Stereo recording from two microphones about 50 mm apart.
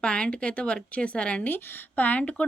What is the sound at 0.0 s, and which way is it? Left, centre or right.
Speech, left.